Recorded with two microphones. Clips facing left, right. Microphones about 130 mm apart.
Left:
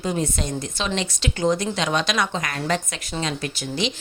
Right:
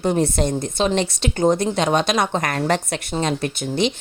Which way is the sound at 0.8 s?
50° right (ahead or behind).